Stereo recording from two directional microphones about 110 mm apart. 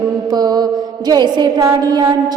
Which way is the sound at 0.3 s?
40° right (ahead or behind).